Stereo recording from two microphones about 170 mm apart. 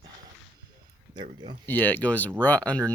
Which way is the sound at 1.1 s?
25° right (ahead or behind).